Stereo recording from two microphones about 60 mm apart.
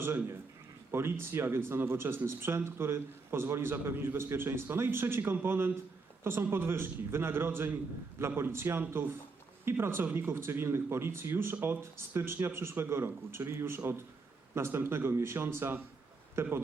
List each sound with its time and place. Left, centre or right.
0.9 s a man's voice: right